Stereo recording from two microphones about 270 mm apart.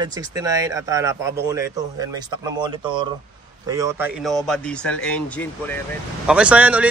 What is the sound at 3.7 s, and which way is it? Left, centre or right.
Speech, centre.